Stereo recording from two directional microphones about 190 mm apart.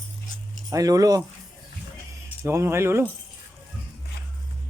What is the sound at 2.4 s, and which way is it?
Speech, 15° right (ahead or behind).